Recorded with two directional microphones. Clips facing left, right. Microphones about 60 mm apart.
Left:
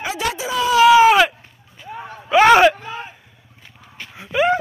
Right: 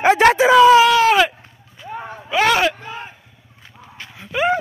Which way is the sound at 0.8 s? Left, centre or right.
Centre.